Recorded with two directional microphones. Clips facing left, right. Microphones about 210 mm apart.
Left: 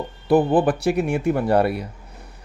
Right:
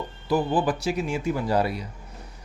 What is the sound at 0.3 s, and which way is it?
Speech, 55° left (ahead or behind).